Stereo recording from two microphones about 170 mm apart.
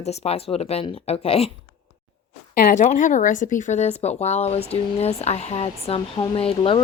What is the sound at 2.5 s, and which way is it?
Speech, 55° left (ahead or behind).